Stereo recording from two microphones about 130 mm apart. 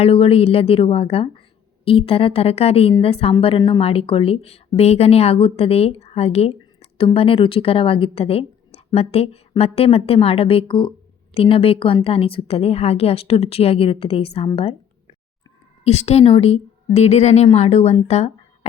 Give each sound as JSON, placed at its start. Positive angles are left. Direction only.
{"t": 0.0, "sound": "a woman's voice", "side_deg": 50}
{"t": 15.8, "sound": "a woman's voice", "side_deg": 55}